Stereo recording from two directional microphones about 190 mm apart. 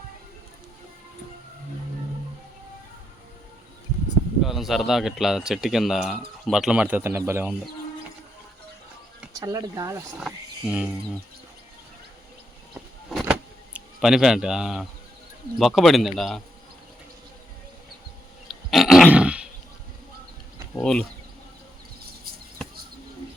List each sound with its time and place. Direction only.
4.4 s speech: centre (ahead or behind)
9.3 s speech: 20° right (ahead or behind)
10.2 s speech: 5° right (ahead or behind)
13.1 s a sound: centre (ahead or behind)
13.7 s a man's voice: 5° right (ahead or behind)
18.7 s grunt: centre (ahead or behind)
20.8 s speech: 5° left (ahead or behind)